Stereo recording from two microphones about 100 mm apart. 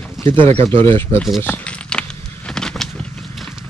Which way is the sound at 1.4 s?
15° left (ahead or behind).